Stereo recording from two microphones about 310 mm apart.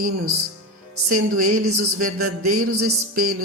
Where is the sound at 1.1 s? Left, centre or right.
Right.